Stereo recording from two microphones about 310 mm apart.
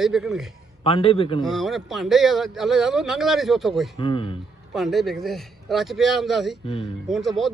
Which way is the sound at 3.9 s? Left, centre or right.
Centre.